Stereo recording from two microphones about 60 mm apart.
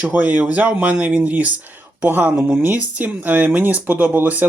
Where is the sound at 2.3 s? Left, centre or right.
Centre.